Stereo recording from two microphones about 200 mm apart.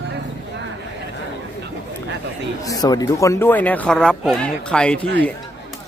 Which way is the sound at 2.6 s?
20° left (ahead or behind).